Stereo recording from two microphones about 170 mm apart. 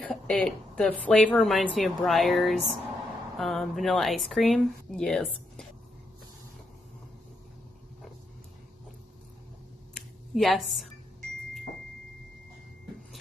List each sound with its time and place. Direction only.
0.0 s speech: 5° left (ahead or behind)
10.3 s speech: centre (ahead or behind)